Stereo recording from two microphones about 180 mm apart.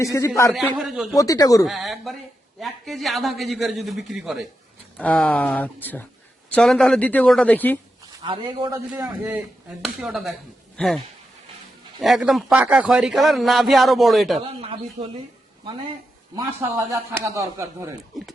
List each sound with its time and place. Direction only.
0.0 s speech: 15° left (ahead or behind)
0.5 s a man's voice: centre (ahead or behind)
1.1 s speech: 20° left (ahead or behind)
1.6 s a man's voice: centre (ahead or behind)
8.2 s speech: 25° right (ahead or behind)
9.0 s a man's voice: 10° right (ahead or behind)
14.3 s speech: 30° right (ahead or behind)
16.3 s speech: 20° right (ahead or behind)